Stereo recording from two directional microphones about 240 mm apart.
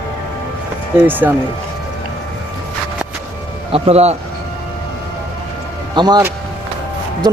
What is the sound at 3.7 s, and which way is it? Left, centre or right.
Speech, right.